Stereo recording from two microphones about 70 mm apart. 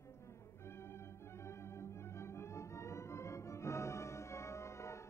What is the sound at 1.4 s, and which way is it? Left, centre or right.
Music, left.